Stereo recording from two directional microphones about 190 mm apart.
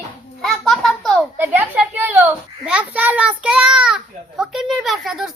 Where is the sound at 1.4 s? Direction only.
10° right (ahead or behind).